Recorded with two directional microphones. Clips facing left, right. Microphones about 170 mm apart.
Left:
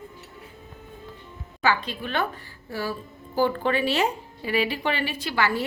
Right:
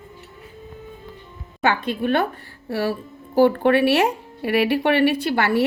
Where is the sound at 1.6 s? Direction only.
55° right (ahead or behind).